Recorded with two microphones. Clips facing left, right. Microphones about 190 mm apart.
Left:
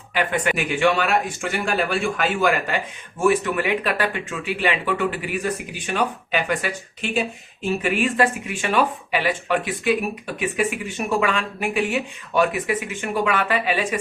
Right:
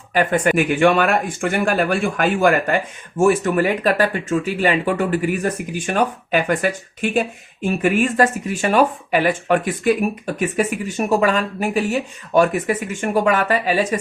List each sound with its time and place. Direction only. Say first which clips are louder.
0.1 s speech: right 5 dB; 45° right (ahead or behind)